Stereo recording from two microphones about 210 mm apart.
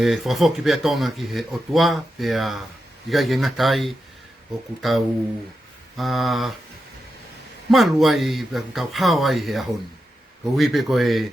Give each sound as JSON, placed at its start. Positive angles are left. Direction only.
{"t": 0.0, "sound": "speech", "side_deg": 0}
{"t": 7.7, "sound": "speech", "side_deg": 0}